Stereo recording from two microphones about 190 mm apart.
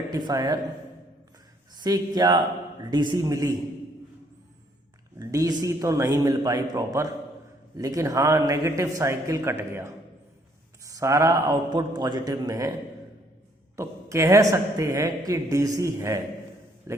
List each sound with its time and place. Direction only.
0.1 s a man's voice: 20° right (ahead or behind)
1.7 s a man's voice: 20° right (ahead or behind)
5.2 s a man's voice: 20° right (ahead or behind)
13.7 s speech: 15° right (ahead or behind)